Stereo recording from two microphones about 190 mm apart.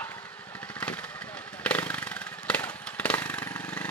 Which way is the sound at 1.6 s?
5° left (ahead or behind).